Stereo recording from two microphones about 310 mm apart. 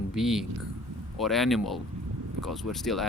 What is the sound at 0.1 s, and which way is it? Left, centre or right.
Speech, centre.